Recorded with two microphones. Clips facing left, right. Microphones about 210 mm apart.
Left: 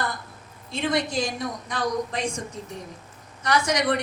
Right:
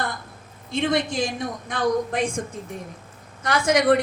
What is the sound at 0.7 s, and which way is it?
A woman's voice, 55° right (ahead or behind).